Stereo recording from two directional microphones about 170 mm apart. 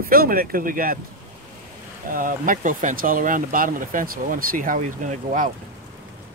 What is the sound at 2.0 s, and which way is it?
Speech, 55° right (ahead or behind).